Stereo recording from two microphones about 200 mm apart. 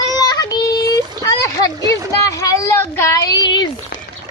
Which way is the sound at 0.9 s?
15° left (ahead or behind).